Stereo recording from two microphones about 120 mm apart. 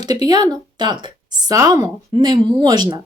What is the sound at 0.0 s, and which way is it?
A woman's voice, 35° right (ahead or behind).